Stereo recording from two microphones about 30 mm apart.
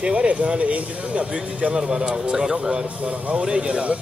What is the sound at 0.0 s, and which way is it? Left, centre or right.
Speech, right.